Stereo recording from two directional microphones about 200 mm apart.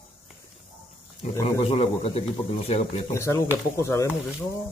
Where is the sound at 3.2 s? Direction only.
15° left (ahead or behind).